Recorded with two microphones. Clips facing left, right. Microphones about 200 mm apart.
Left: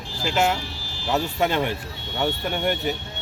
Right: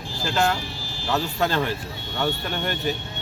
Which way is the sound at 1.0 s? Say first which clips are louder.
Left 1 dB; 20° left (ahead or behind).